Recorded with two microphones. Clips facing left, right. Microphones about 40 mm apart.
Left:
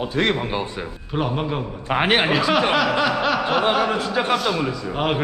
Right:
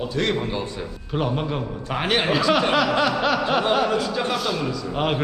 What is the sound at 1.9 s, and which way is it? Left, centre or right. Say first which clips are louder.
Speech: left 4 dB; left.